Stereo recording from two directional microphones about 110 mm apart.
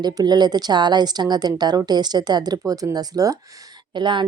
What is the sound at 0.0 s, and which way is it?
A woman's voice, 40° right (ahead or behind).